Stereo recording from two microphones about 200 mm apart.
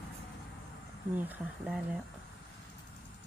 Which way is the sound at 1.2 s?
10° right (ahead or behind).